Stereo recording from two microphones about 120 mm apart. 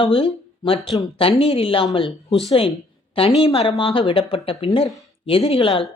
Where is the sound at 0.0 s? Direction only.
50° left (ahead or behind).